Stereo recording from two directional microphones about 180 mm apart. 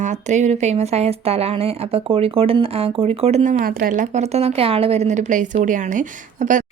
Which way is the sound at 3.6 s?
55° right (ahead or behind).